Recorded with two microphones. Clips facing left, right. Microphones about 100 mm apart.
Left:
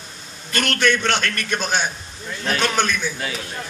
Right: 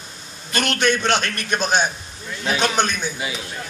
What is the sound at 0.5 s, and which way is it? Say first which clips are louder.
A man's voice: even; 20° right (ahead or behind).